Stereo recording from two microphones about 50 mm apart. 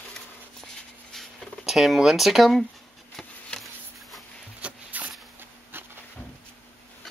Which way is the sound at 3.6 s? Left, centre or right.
Centre.